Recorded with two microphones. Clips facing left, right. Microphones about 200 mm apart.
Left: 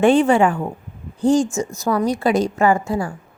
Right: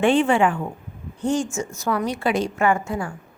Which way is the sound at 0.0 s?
40° left (ahead or behind).